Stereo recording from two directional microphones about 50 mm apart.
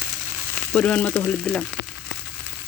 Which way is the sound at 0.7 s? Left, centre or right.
Left.